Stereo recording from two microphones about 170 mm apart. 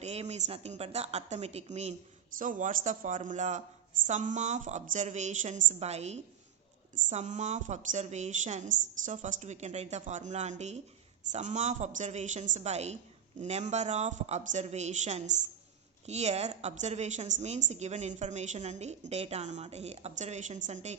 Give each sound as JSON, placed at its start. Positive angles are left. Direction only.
{"t": 0.0, "sound": "a woman's voice", "side_deg": -40}